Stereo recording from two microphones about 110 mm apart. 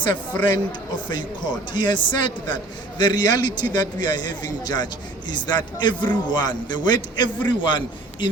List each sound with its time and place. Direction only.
0.0 s a man's voice: 40° left (ahead or behind)